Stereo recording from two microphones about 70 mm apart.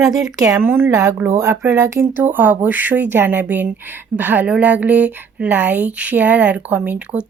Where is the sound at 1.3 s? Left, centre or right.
Right.